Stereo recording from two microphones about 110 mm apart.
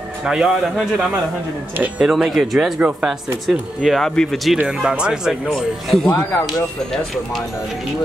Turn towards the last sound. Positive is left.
turn(degrees=0)  # may be behind; listen again after turning